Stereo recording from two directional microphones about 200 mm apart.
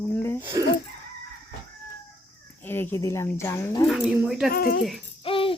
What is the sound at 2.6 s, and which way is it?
Speech, 10° left (ahead or behind).